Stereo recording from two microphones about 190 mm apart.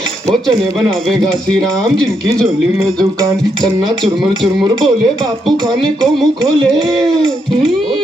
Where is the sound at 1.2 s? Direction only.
5° left (ahead or behind).